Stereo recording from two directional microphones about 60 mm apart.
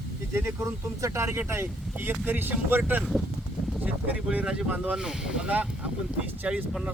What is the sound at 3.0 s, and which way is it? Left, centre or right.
Speech, centre.